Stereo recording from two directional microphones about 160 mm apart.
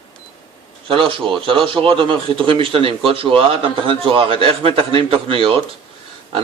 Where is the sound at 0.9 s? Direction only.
35° right (ahead or behind).